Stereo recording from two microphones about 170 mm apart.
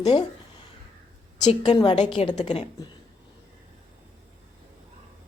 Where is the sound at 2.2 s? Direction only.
40° left (ahead or behind).